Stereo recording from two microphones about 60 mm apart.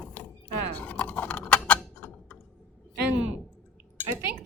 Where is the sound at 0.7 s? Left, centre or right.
Left.